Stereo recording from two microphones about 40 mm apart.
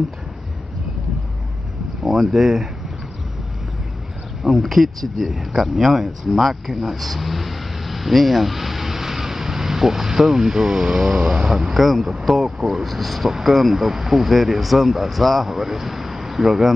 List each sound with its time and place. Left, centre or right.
2.0 s speech: centre
4.4 s speech: centre
11.8 s speech: centre
12.8 s speech: centre